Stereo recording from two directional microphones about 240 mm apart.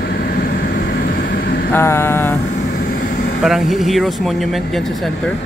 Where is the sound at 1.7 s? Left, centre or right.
Centre.